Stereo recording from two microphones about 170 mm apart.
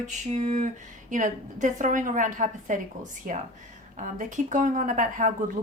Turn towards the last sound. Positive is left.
turn(degrees=-50)  # may be behind; listen again after turning